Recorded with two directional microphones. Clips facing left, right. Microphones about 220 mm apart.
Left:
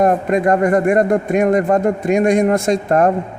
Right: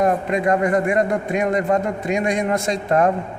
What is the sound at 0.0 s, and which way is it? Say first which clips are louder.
Speech: left 4 dB; 50° left (ahead or behind).